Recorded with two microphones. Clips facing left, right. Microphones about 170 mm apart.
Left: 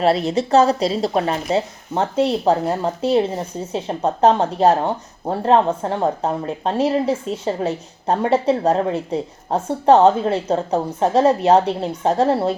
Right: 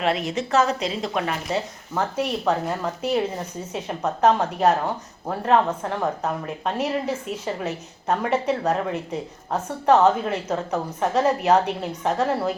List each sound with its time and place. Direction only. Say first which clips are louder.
0.0 s a woman's voice: left 6 dB; 35° left (ahead or behind)